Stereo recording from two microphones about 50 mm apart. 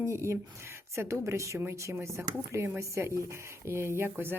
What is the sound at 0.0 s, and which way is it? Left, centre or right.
A woman's voice, right.